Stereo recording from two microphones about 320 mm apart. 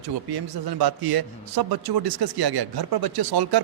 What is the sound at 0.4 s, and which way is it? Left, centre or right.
A man's voice, right.